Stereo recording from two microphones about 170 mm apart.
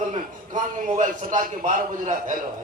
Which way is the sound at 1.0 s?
50° right (ahead or behind).